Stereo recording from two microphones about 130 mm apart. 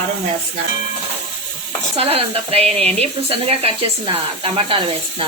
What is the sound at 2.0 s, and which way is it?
Speech, 50° right (ahead or behind).